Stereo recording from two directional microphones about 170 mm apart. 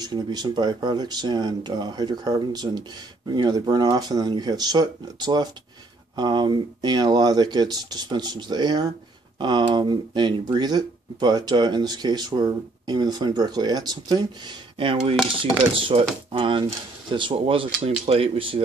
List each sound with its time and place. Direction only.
0.0 s speech: 25° right (ahead or behind)